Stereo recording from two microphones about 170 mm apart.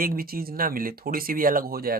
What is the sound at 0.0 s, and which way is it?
Speech, 60° right (ahead or behind).